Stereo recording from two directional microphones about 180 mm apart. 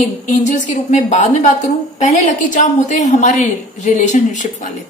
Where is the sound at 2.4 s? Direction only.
45° left (ahead or behind).